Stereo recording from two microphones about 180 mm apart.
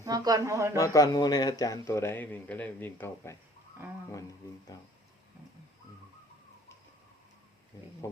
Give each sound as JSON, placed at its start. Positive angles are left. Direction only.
{"t": 0.0, "sound": "a man's voice", "side_deg": -20}
{"t": 0.8, "sound": "speech", "side_deg": 20}